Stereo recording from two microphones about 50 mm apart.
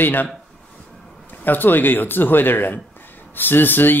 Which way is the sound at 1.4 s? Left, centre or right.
Left.